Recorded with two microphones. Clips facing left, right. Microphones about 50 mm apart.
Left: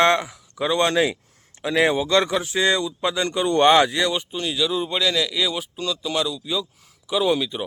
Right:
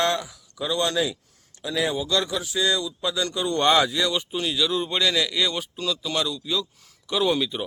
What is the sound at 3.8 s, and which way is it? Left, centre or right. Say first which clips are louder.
Speech: left 3 dB; left.